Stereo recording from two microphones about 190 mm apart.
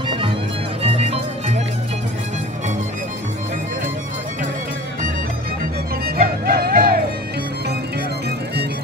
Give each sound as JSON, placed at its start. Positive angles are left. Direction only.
{"t": 0.8, "sound": "music", "side_deg": -35}
{"t": 6.0, "sound": "music", "side_deg": -50}